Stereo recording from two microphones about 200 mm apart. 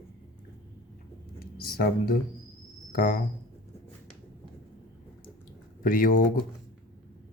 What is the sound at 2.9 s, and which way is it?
Speech, 45° left (ahead or behind).